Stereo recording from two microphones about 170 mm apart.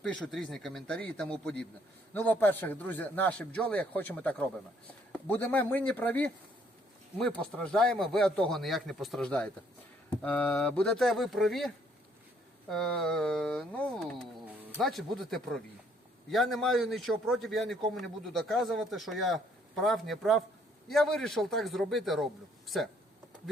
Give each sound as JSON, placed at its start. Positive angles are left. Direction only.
{"t": 0.0, "sound": "a man's voice", "side_deg": 5}